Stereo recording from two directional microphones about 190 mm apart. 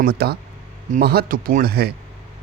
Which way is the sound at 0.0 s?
55° right (ahead or behind).